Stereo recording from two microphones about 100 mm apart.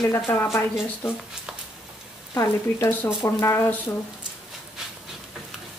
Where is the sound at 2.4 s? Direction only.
25° left (ahead or behind).